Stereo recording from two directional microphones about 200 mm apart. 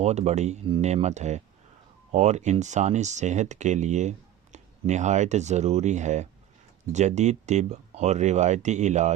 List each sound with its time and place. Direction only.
0.0 s speech: 35° right (ahead or behind)